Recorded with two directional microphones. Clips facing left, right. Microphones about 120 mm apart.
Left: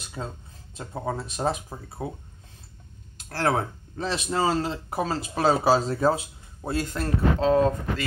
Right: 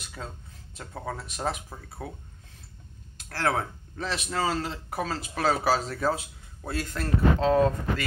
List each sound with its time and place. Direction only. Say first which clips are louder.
0.2 s speech: left 5 dB; 25° left (ahead or behind)
3.2 s speech: left 3 dB; 25° left (ahead or behind)